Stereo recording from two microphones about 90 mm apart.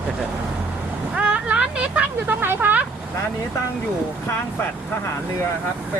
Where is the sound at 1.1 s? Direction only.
10° right (ahead or behind).